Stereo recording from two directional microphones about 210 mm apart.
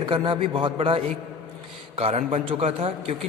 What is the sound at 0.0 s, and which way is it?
A man's voice, 25° right (ahead or behind).